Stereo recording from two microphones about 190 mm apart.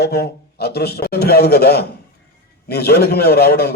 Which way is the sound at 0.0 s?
55° left (ahead or behind).